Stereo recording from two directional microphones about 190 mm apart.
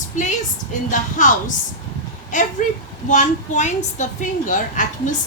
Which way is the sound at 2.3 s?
40° left (ahead or behind).